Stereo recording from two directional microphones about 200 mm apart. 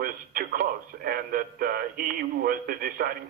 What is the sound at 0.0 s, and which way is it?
Radio, 45° right (ahead or behind).